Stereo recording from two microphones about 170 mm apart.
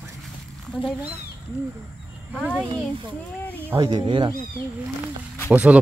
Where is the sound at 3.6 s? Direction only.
20° right (ahead or behind).